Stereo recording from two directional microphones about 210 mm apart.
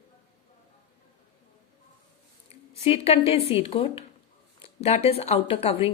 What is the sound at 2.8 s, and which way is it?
A woman's voice, 30° left (ahead or behind).